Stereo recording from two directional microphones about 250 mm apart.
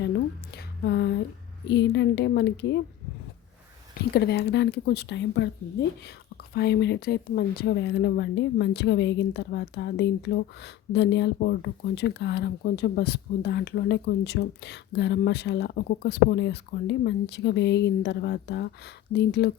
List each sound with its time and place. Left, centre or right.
0.5 s a sound: left
1.6 s speech: left
4.1 s speech: left